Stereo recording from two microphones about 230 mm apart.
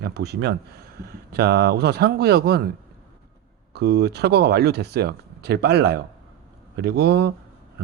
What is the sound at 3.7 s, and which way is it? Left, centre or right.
Speech, right.